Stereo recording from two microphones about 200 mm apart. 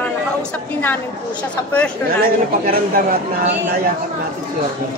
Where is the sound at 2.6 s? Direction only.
45° right (ahead or behind).